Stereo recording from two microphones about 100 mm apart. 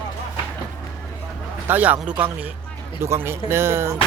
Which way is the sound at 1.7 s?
15° right (ahead or behind).